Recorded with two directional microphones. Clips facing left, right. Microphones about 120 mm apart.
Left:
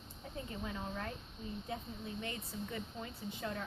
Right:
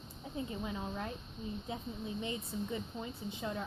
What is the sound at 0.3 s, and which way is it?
Speech, 20° right (ahead or behind).